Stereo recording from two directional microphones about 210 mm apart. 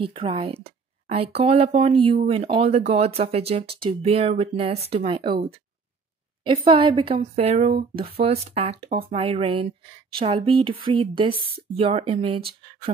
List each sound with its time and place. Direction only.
0.0 s speech: 25° right (ahead or behind)